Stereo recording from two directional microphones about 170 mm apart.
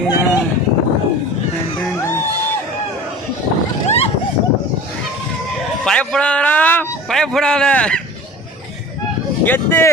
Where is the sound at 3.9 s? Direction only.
35° left (ahead or behind).